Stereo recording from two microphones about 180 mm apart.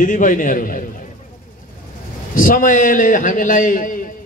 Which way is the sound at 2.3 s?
50° left (ahead or behind).